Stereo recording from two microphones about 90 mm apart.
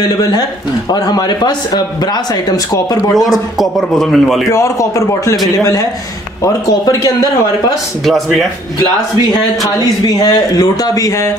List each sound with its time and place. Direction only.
0.2 s speech: 45° left (ahead or behind)
3.2 s a man's voice: centre (ahead or behind)
4.5 s a man's voice: 35° left (ahead or behind)
6.4 s a man's voice: 35° left (ahead or behind)
8.0 s a man's voice: centre (ahead or behind)
9.8 s speech: 45° left (ahead or behind)